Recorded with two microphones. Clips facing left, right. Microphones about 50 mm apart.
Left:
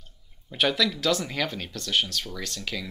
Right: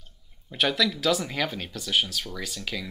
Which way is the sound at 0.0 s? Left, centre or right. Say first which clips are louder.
Even; centre.